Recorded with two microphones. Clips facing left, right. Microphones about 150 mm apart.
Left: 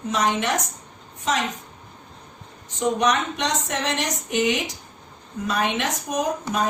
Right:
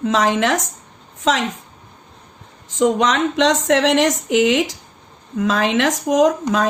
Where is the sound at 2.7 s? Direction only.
90° right.